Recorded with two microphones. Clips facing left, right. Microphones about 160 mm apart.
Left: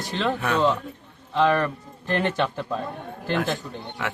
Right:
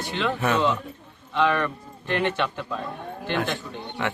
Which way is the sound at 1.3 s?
35° left (ahead or behind).